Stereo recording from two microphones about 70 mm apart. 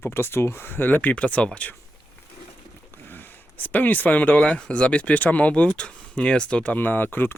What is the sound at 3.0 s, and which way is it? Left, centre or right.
Speech, left.